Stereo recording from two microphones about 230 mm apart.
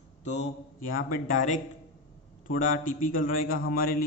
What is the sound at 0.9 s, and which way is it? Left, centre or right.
A man's voice, left.